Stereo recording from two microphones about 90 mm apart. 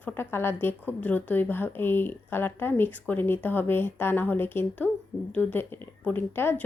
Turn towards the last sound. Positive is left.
turn(degrees=25)  # may be behind; listen again after turning